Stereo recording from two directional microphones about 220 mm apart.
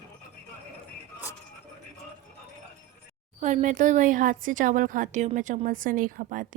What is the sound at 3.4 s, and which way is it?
Speech, 35° right (ahead or behind).